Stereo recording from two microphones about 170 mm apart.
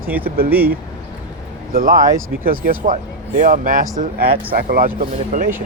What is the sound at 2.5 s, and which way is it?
Speech, 50° right (ahead or behind).